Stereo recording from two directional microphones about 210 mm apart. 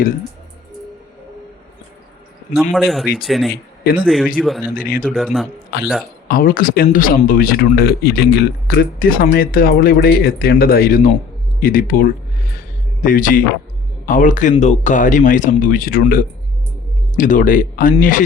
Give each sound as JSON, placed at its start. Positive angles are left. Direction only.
{"t": 2.7, "sound": "speech", "side_deg": 0}
{"t": 3.5, "sound": "speech", "side_deg": 45}
{"t": 4.4, "sound": "speech", "side_deg": 0}
{"t": 4.7, "sound": "speech", "side_deg": 40}
{"t": 5.0, "sound": "speech", "side_deg": 0}
{"t": 5.7, "sound": "speech", "side_deg": 50}
{"t": 12.5, "sound": "music", "side_deg": 40}
{"t": 14.1, "sound": "speech", "side_deg": 35}